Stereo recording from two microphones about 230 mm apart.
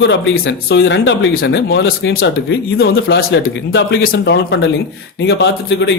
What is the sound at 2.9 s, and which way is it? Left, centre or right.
Speech, left.